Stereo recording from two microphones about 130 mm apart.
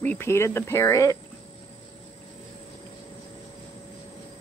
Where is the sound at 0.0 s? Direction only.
15° left (ahead or behind).